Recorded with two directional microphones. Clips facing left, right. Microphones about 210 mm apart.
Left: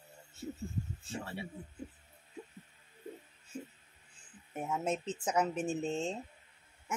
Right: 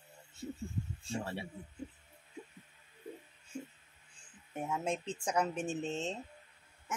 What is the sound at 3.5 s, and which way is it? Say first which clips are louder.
Music: even; 5° left (ahead or behind).